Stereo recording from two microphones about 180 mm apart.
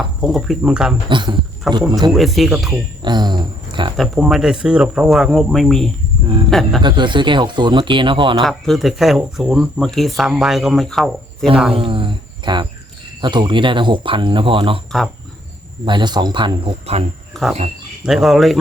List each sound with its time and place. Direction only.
0.0 s speech: centre (ahead or behind)
1.1 s speech: 25° right (ahead or behind)
2.1 s speech: centre (ahead or behind)
3.0 s speech: 25° right (ahead or behind)
3.9 s speech: centre (ahead or behind)
6.8 s speech: 25° right (ahead or behind)
8.4 s speech: centre (ahead or behind)
11.7 s speech: 30° right (ahead or behind)
15.8 s speech: 25° right (ahead or behind)
18.0 s speech: centre (ahead or behind)